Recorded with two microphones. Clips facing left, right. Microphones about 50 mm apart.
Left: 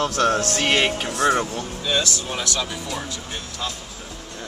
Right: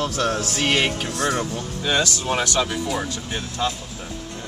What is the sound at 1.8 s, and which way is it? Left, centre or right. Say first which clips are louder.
Speech: right 3 dB; right.